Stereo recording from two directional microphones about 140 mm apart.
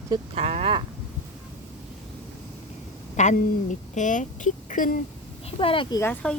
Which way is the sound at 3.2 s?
60° left (ahead or behind).